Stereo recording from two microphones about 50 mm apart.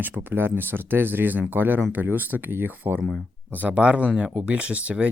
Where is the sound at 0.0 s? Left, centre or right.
Right.